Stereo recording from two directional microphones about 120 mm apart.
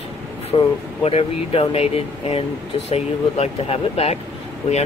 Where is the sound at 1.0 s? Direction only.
55° left (ahead or behind).